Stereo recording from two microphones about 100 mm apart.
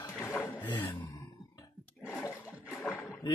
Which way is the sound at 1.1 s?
35° left (ahead or behind).